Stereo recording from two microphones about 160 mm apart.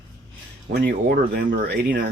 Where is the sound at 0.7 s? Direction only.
80° right.